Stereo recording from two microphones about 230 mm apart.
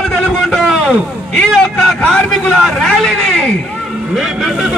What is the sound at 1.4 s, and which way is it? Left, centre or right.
Vehicle, centre.